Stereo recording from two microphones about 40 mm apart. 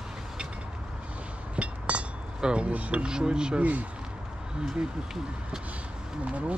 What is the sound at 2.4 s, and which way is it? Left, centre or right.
Speech, right.